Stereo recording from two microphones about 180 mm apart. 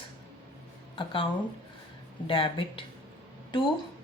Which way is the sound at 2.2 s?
30° left (ahead or behind).